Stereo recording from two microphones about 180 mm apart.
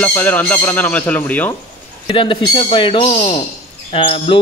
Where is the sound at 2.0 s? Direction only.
30° left (ahead or behind).